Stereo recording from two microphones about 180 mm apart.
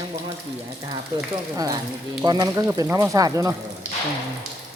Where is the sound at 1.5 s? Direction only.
20° right (ahead or behind).